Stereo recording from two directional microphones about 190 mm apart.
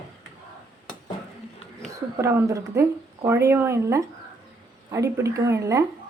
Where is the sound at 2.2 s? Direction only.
15° right (ahead or behind).